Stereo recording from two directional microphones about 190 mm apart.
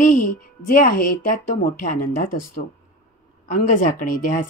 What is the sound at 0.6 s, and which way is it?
Speech, 45° left (ahead or behind).